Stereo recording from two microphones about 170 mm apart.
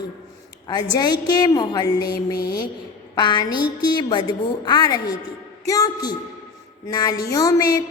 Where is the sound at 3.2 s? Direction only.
25° left (ahead or behind).